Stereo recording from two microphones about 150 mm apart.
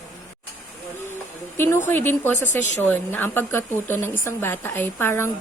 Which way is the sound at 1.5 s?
15° left (ahead or behind).